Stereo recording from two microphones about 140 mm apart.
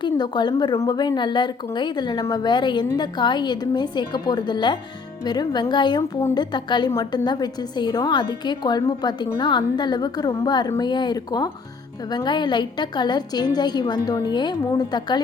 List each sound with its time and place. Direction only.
0.0 s a woman's voice: 30° left (ahead or behind)